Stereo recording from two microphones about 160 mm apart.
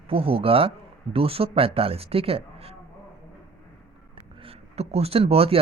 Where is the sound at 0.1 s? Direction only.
35° right (ahead or behind).